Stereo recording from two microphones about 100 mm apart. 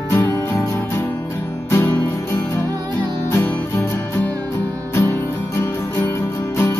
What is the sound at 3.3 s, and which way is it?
Music, 25° left (ahead or behind).